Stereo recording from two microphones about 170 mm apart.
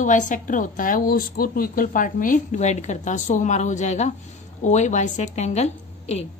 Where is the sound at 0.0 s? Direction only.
50° left (ahead or behind).